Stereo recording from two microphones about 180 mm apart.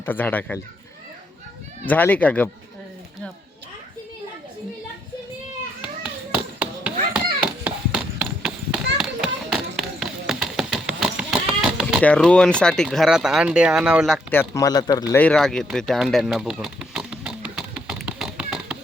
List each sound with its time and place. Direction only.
0.0 s speech: 10° left (ahead or behind)
1.9 s speech: 10° left (ahead or behind)
5.8 s tap: 5° right (ahead or behind)
7.6 s a sound: 5° right (ahead or behind)
14.3 s speech: 15° left (ahead or behind)
15.2 s a sound: 5° left (ahead or behind)